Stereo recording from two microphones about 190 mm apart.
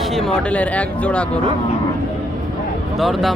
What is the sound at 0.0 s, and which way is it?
Speech, centre (ahead or behind).